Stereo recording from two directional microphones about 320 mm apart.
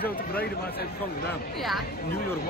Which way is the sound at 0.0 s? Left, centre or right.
Left.